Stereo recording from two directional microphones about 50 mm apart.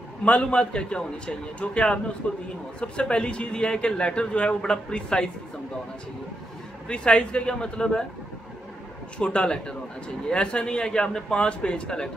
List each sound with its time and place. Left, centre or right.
0.2 s a man's voice: left
6.9 s a man's voice: centre
9.2 s a man's voice: centre